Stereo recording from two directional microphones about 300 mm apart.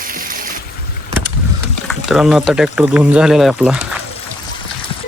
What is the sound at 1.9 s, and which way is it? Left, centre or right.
Speech, centre.